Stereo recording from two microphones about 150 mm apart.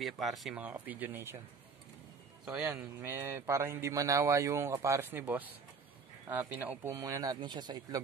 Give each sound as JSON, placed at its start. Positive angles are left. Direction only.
{"t": 0.0, "sound": "speech", "side_deg": 0}
{"t": 2.4, "sound": "a man's voice", "side_deg": -5}